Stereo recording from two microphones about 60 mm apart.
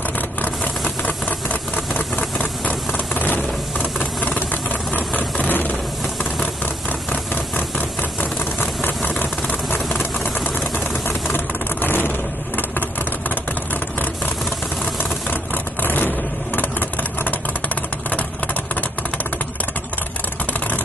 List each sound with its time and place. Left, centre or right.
0.8 s engine: left
2.3 s a sound: left
6.9 s a sound: left
8.2 s vehicle: left
11.1 s vehicle: left
15.2 s vehicle: left
18.1 s vehicle: left